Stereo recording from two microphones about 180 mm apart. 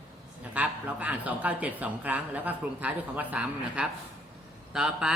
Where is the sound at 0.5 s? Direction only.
10° right (ahead or behind).